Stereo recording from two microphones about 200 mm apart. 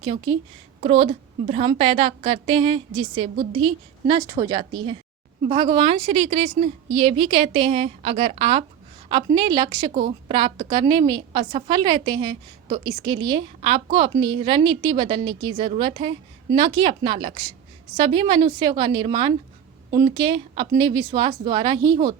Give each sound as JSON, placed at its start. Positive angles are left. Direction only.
{"t": 0.0, "sound": "a woman's voice", "side_deg": -25}